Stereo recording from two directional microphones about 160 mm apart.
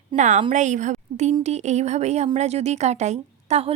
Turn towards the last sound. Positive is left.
turn(degrees=-40)  # may be behind; listen again after turning